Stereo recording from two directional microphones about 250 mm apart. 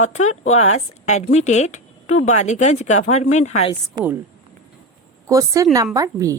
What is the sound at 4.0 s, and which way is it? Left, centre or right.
Speech, centre.